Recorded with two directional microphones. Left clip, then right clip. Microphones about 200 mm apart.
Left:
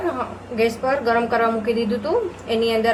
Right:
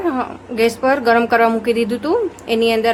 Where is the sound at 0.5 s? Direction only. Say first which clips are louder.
Right 5 dB; 55° right (ahead or behind).